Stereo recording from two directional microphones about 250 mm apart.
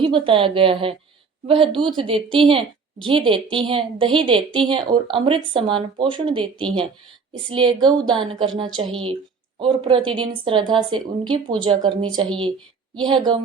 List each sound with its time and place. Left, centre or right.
0.0 s a woman's voice: right